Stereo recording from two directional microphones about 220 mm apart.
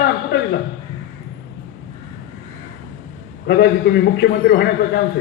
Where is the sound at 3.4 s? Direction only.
45° left (ahead or behind).